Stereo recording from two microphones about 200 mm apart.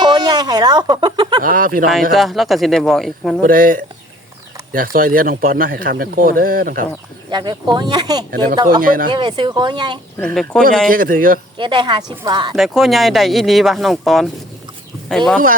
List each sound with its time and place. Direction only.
0.0 s speech: 20° right (ahead or behind)
1.4 s speech: 45° right (ahead or behind)
2.1 s speech: centre (ahead or behind)
3.4 s speech: 45° right (ahead or behind)
7.3 s speech: 20° right (ahead or behind)
8.8 s speech: 45° right (ahead or behind)
9.0 s speech: 25° right (ahead or behind)
10.2 s speech: 5° left (ahead or behind)
10.8 s speech: 45° right (ahead or behind)
11.5 s speech: 25° right (ahead or behind)
12.5 s speech: centre (ahead or behind)